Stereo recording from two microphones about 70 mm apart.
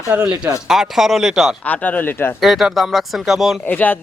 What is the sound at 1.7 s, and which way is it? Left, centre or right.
Speech, left.